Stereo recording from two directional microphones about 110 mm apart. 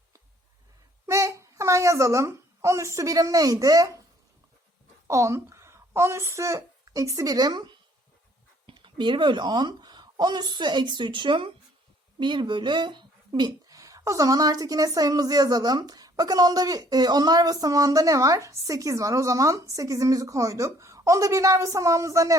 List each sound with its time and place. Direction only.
1.0 s a child's voice: 25° right (ahead or behind)
5.0 s a woman's voice: 30° right (ahead or behind)